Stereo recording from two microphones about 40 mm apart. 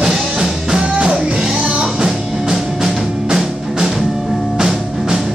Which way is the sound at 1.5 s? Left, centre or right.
Right.